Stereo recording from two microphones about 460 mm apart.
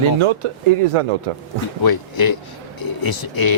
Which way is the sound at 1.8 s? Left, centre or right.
Left.